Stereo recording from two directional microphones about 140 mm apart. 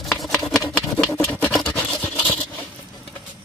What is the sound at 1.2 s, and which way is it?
Scratch, 10° left (ahead or behind).